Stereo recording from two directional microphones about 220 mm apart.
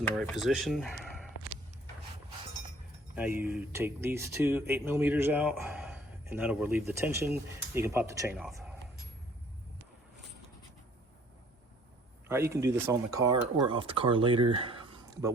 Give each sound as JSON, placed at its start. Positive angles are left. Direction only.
{"t": 0.2, "sound": "speech", "side_deg": 0}
{"t": 3.2, "sound": "speech", "side_deg": -10}
{"t": 12.3, "sound": "speech", "side_deg": -10}